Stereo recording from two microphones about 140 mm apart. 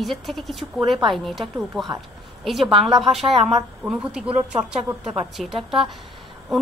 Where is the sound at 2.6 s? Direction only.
40° right (ahead or behind).